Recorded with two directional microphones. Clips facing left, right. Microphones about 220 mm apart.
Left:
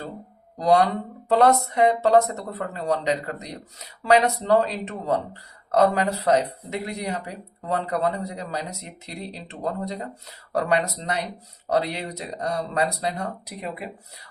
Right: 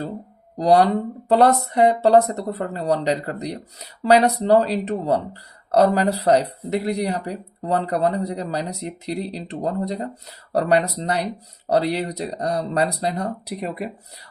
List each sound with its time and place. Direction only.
0.6 s speech: 35° right (ahead or behind)